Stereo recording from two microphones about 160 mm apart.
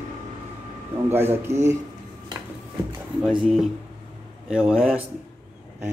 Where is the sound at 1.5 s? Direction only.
45° right (ahead or behind).